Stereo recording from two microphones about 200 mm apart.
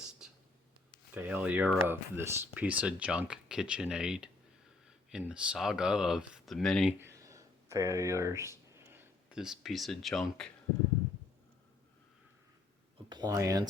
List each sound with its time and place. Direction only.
0.2 s whispering: 5° right (ahead or behind)
1.1 s speech: 10° right (ahead or behind)
7.0 s a sound: 15° right (ahead or behind); by 10.5 s centre (ahead or behind)
13.1 s speech: 20° right (ahead or behind)